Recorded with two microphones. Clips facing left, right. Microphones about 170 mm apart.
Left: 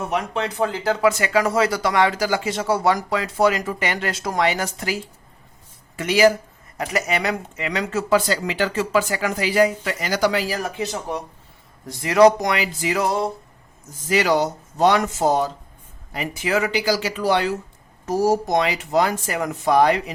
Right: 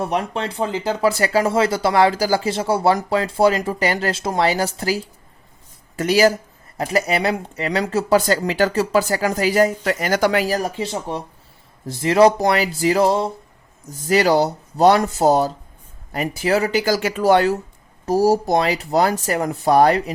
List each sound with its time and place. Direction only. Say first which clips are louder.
0.0 s speech: right 2 dB; 35° right (ahead or behind)
6.0 s speech: right 1 dB; 40° right (ahead or behind)
10.8 s speech: right 1 dB; 30° right (ahead or behind)
16.8 s speech: right 4 dB; 50° right (ahead or behind)
18.0 s speech: right 3 dB; 35° right (ahead or behind)